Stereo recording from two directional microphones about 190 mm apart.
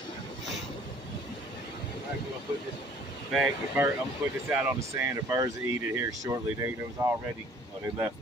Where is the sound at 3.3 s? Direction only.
5° right (ahead or behind).